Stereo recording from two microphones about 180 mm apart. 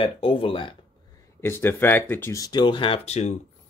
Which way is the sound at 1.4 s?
15° left (ahead or behind).